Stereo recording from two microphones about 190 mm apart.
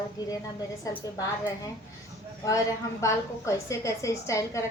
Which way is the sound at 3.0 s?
15° left (ahead or behind).